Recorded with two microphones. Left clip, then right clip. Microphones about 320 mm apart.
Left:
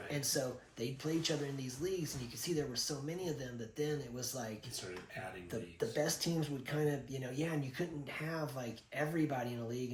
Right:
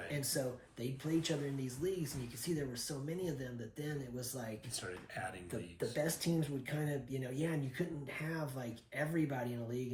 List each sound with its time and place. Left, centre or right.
0.1 s a sound: centre
0.8 s speech: centre
5.5 s speech: centre